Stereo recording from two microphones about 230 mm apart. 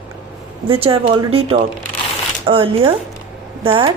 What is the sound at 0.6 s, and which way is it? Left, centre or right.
Speech, right.